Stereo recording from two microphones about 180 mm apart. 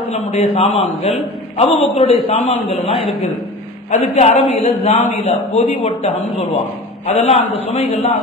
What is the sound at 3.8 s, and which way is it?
A woman's voice, 40° left (ahead or behind).